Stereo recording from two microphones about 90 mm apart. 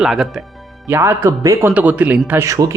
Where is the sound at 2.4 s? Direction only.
35° right (ahead or behind).